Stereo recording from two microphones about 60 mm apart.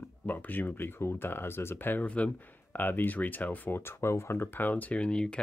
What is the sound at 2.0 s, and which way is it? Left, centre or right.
Speech, left.